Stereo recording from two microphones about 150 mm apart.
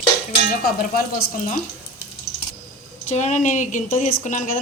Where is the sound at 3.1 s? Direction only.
50° left (ahead or behind).